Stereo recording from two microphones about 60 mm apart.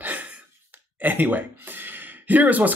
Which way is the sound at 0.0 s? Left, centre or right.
Right.